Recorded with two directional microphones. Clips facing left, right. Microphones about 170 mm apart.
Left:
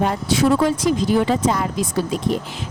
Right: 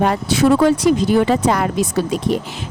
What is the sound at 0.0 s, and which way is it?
Speech, 75° right (ahead or behind).